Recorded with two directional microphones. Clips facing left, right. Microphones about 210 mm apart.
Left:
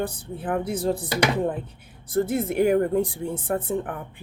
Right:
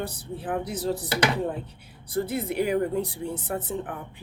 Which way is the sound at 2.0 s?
50° left (ahead or behind).